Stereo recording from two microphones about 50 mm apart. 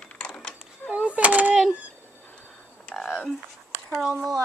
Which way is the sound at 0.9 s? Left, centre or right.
Right.